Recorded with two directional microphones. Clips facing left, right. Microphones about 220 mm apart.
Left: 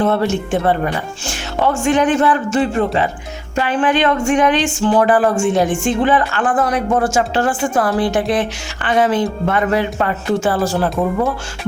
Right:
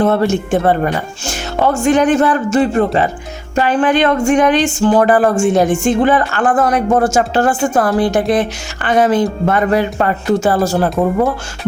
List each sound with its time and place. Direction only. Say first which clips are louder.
0.0 s speech: right 3 dB; 45° right (ahead or behind)